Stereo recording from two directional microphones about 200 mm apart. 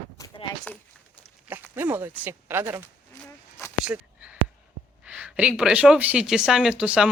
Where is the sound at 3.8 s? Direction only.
5° right (ahead or behind).